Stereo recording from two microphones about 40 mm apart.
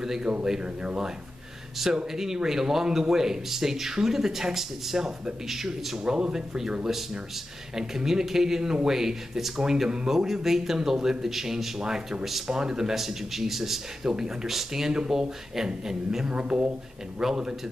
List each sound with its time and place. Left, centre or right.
0.0 s speech: centre
16.3 s speech: right
17.2 s speech: centre